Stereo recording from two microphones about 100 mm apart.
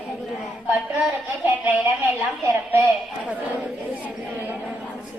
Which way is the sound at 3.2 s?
10° right (ahead or behind).